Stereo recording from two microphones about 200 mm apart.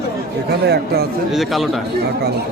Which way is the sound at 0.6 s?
55° right (ahead or behind).